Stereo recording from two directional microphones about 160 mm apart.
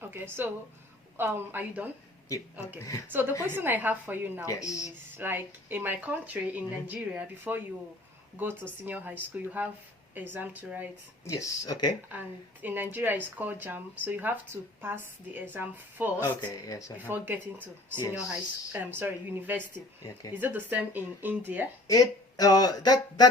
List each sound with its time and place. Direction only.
0.0 s speech: 15° right (ahead or behind)
2.7 s speech: 20° left (ahead or behind)
3.1 s speech: 10° right (ahead or behind)
4.4 s speech: 20° left (ahead or behind)
5.1 s speech: 15° right (ahead or behind)
11.3 s speech: 20° left (ahead or behind)
12.6 s speech: 10° right (ahead or behind)
16.2 s speech: 15° left (ahead or behind)
17.0 s speech: 10° right (ahead or behind)
21.8 s speech: 20° left (ahead or behind)